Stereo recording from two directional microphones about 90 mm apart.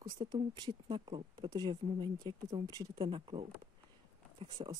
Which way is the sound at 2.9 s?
70° right (ahead or behind).